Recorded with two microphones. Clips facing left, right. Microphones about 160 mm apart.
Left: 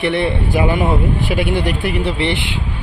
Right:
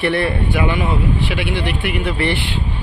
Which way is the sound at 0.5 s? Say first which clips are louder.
Left 3 dB; 40° left (ahead or behind).